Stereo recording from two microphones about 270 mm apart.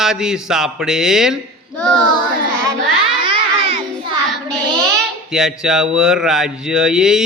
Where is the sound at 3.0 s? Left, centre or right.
Centre.